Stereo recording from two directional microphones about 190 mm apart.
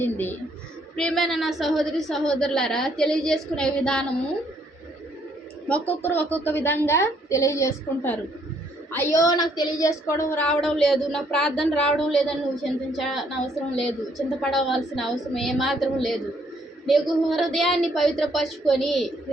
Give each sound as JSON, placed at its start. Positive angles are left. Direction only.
{"t": 0.0, "sound": "a woman's voice", "side_deg": 10}
{"t": 5.6, "sound": "a woman's voice", "side_deg": 5}